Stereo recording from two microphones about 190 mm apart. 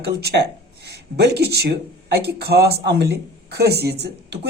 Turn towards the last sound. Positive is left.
turn(degrees=-60)  # may be behind; listen again after turning